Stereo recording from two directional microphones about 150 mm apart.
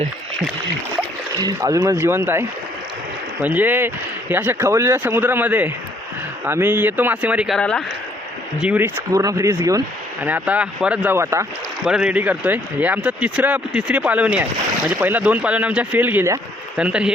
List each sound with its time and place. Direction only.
1.4 s speech: 25° right (ahead or behind)
3.4 s speech: 10° right (ahead or behind)
7.6 s speech: 5° left (ahead or behind)
8.6 s speech: 10° right (ahead or behind)
9.1 s speech: 20° right (ahead or behind)
10.2 s speech: 10° right (ahead or behind)
11.9 s speech: 5° right (ahead or behind)